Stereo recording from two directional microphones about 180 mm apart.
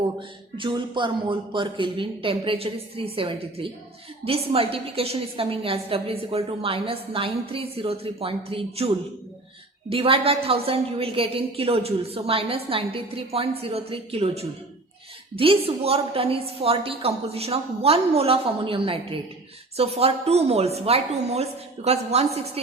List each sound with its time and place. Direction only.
0.2 s a woman's voice: 25° right (ahead or behind)
9.9 s a woman's voice: 30° right (ahead or behind)